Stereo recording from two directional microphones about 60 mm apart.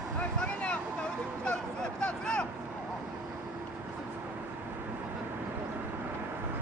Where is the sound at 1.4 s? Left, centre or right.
Centre.